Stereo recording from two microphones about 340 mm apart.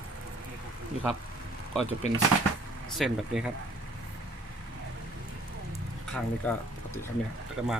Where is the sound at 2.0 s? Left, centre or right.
Centre.